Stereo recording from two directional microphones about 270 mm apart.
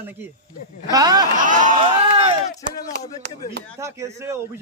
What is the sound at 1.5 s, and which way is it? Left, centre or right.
Speech, right.